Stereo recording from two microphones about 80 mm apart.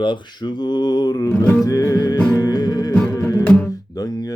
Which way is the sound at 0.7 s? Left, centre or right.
Left.